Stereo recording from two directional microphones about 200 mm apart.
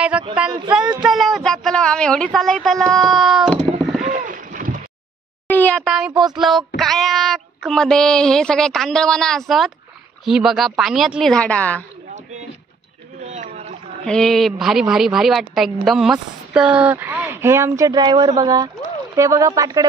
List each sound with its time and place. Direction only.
0.1 s speech: 5° right (ahead or behind)
0.5 s a sound: 20° right (ahead or behind)
1.0 s a woman's voice: centre (ahead or behind)
4.0 s rowboat: 40° right (ahead or behind)
5.5 s a child's voice: 5° left (ahead or behind)
13.2 s a sound: 35° right (ahead or behind)
14.0 s a woman's voice: 5° left (ahead or behind); by 19.9 s 20° right (ahead or behind)